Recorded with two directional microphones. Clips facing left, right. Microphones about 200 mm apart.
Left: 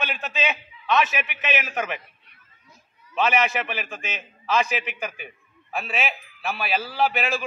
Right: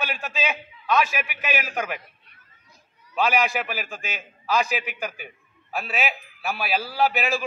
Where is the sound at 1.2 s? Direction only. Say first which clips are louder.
Left 1 dB; centre (ahead or behind).